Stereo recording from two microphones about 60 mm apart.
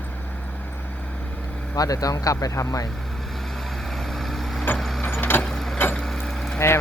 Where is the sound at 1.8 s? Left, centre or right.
Left.